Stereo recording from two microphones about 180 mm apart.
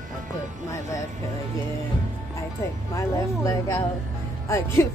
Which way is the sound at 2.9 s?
20° left (ahead or behind).